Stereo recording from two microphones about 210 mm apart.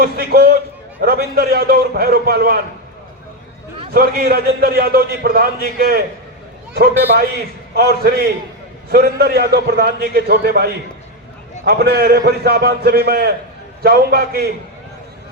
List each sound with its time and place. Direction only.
0.0 s a man's voice: 45° right (ahead or behind)
3.9 s a man's voice: 45° right (ahead or behind)